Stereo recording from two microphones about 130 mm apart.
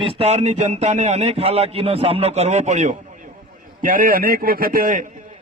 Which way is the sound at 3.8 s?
90° right.